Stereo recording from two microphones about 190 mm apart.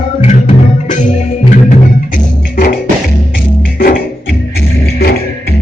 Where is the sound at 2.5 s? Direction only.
50° left (ahead or behind).